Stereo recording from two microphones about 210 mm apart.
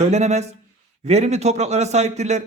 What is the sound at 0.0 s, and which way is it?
A man's voice, 30° right (ahead or behind).